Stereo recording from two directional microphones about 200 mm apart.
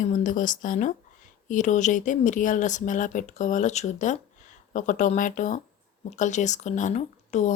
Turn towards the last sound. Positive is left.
turn(degrees=35)  # may be behind; listen again after turning